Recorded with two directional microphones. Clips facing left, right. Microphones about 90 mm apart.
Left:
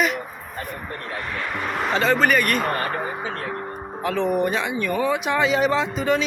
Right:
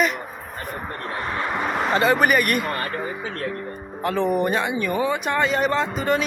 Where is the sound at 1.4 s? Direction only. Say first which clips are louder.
Right 4 dB; 25° right (ahead or behind).